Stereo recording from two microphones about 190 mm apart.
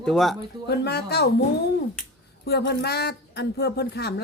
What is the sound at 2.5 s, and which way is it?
Speech, 60° left (ahead or behind).